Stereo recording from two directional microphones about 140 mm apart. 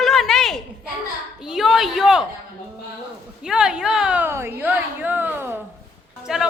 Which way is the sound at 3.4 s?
5° right (ahead or behind).